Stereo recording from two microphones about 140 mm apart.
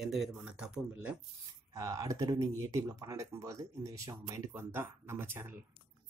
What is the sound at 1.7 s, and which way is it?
Speech, 25° right (ahead or behind).